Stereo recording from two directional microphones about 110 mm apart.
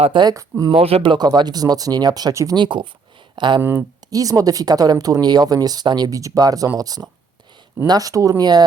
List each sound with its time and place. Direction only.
0.2 s speech: 30° right (ahead or behind)
0.7 s speech: 60° right (ahead or behind)
1.3 s speech: 35° right (ahead or behind)
2.6 s speech: 45° right (ahead or behind)
3.6 s speech: 20° right (ahead or behind)
4.1 s speech: 30° right (ahead or behind)